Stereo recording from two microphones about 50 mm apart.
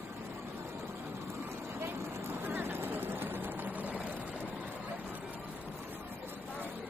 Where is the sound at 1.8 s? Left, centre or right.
Right.